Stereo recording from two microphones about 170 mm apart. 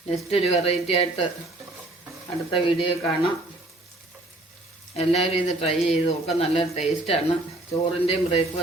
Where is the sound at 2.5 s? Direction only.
30° left (ahead or behind).